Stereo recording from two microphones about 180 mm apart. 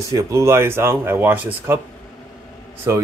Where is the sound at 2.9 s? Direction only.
15° right (ahead or behind).